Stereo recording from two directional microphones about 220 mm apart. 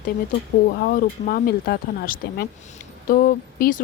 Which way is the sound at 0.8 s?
40° left (ahead or behind).